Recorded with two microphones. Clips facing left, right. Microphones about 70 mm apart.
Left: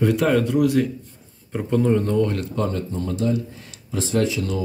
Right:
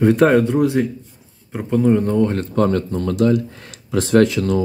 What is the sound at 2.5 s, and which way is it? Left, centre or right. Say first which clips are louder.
Speech: right 7 dB; right.